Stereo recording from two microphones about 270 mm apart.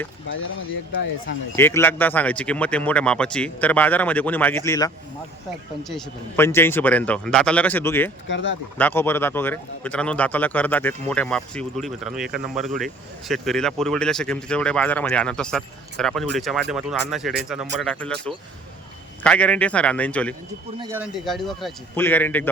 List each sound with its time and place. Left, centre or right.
1.5 s a man's voice: centre
5.9 s a man's voice: centre
8.3 s speech: left
8.8 s a man's voice: centre
20.7 s a man's voice: centre